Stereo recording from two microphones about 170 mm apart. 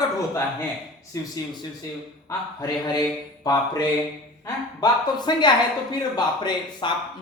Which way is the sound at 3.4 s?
20° left (ahead or behind).